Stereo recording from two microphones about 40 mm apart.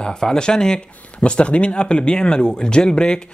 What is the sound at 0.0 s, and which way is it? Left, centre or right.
Speech, centre.